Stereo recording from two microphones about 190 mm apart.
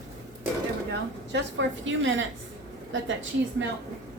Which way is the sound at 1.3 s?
75° right (ahead or behind).